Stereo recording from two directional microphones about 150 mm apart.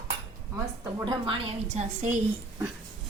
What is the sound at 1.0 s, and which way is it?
A woman's voice, 35° right (ahead or behind).